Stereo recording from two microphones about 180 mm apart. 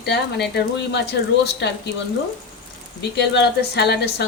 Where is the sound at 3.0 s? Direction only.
70° left (ahead or behind).